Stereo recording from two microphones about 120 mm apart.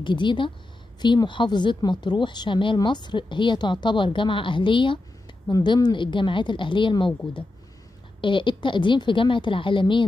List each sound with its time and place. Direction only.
0.0 s a woman's voice: 40° left (ahead or behind)
8.2 s a woman's voice: 40° left (ahead or behind)